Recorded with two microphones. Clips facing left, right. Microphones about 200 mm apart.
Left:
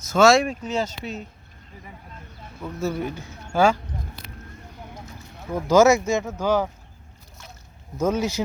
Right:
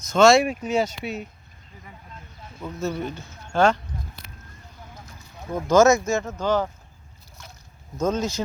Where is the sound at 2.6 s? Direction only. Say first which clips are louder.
Left 1 dB; 5° left (ahead or behind).